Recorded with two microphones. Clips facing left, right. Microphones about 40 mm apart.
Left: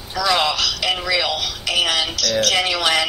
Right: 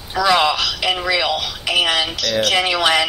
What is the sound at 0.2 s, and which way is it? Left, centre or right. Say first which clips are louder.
Speech: right 3 dB; centre.